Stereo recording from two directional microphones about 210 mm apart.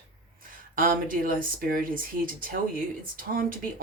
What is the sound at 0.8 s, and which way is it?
Speech, 40° right (ahead or behind).